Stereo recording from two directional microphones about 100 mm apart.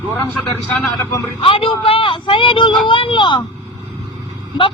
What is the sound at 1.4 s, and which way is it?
Speech, 65° left (ahead or behind).